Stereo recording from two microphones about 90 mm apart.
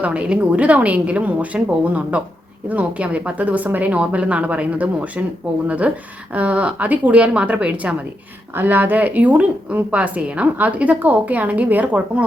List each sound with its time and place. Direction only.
0.0 s a woman's voice: 15° right (ahead or behind)